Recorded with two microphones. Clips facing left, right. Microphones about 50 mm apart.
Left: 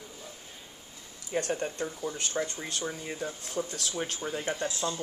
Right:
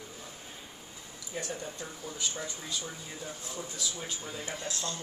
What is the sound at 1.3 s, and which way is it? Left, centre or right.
Speech, left.